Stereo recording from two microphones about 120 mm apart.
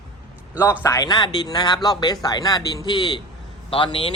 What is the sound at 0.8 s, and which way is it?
Speech, 30° left (ahead or behind).